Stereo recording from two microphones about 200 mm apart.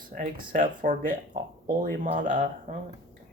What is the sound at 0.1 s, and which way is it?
Speech, 40° right (ahead or behind).